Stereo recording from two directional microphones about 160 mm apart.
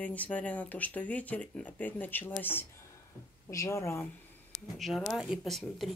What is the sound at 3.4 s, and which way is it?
Speech, 20° left (ahead or behind).